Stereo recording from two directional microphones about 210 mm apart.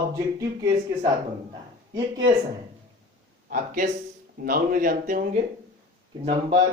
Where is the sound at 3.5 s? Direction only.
40° right (ahead or behind).